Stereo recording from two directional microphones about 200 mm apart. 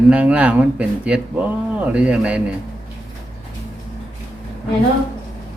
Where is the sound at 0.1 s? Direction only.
5° right (ahead or behind).